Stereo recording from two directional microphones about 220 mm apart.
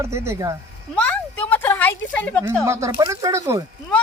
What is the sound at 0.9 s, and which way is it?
Speech, 5° left (ahead or behind).